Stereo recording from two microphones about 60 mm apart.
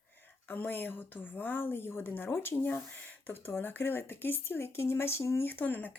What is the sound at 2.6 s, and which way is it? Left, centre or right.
Speech, left.